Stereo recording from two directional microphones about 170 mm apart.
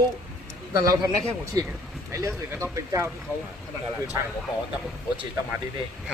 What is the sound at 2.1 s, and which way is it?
Speech, 15° right (ahead or behind).